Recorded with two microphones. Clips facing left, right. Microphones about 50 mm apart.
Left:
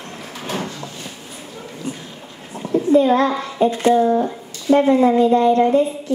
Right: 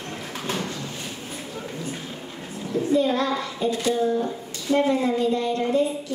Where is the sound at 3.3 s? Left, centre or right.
Left.